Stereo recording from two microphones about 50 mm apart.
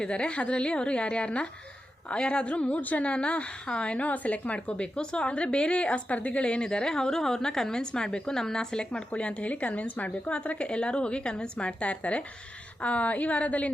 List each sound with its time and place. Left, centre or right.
0.0 s a woman's voice: left